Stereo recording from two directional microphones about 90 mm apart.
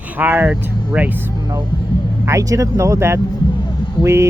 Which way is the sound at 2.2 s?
35° right (ahead or behind).